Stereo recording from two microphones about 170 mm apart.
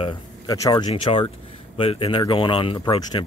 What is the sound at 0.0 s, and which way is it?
Speech, 25° left (ahead or behind).